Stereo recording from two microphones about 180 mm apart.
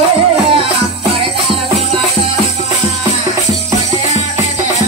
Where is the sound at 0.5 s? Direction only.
30° right (ahead or behind).